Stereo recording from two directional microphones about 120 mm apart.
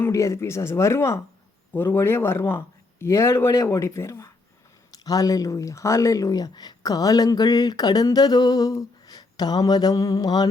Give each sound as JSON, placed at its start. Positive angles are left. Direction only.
{"t": 0.0, "sound": "a man's voice", "side_deg": 25}